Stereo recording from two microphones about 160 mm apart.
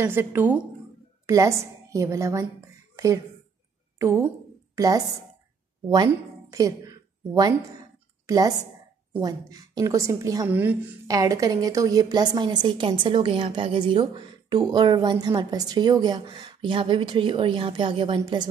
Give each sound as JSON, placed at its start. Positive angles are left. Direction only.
{"t": 0.0, "sound": "a woman's voice", "side_deg": -15}
{"t": 4.0, "sound": "a woman's voice", "side_deg": -15}
{"t": 6.0, "sound": "a woman's voice", "side_deg": -20}
{"t": 11.1, "sound": "a woman's voice", "side_deg": -20}